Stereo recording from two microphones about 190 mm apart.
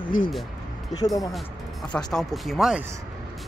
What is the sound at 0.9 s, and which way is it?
Speech, 20° left (ahead or behind).